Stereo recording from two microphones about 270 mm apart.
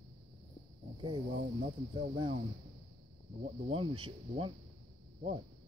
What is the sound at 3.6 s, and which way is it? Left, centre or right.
Speech, centre.